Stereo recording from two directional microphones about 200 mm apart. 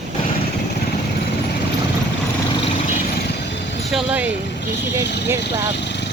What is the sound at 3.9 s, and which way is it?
Speech, 5° right (ahead or behind).